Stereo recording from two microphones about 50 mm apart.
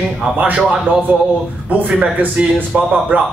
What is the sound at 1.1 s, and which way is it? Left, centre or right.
Speech, right.